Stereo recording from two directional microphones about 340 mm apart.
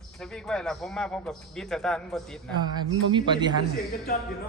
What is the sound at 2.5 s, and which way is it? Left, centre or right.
Speech, centre.